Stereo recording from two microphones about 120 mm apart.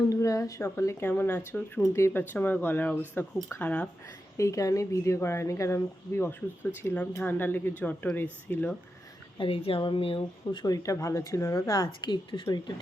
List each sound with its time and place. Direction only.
0.1 s speech: 25° left (ahead or behind)
4.4 s speech: 25° left (ahead or behind)
9.4 s speech: 50° left (ahead or behind); by 11.9 s 25° left (ahead or behind)
12.0 s a woman's voice: 40° left (ahead or behind)